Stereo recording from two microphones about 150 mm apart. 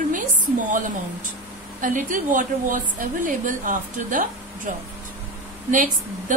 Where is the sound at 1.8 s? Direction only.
60° right (ahead or behind).